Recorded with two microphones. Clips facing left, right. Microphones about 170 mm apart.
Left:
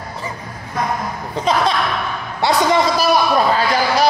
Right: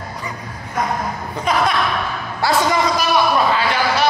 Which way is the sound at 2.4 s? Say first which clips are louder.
Left 1 dB; 20° left (ahead or behind).